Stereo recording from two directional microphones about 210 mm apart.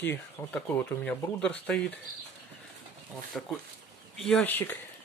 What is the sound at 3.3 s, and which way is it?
Speech, centre (ahead or behind).